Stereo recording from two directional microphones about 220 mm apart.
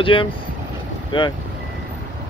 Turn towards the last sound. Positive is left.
turn(degrees=20)  # may be behind; listen again after turning